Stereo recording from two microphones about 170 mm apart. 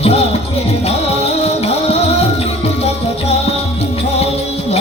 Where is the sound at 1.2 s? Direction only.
35° left (ahead or behind).